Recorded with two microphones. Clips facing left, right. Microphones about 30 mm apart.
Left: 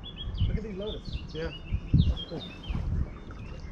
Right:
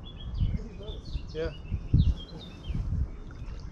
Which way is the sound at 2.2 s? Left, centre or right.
Left.